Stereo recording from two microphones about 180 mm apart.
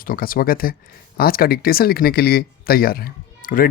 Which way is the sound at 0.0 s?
55° left (ahead or behind).